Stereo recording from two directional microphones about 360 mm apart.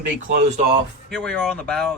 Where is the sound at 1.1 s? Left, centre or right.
Centre.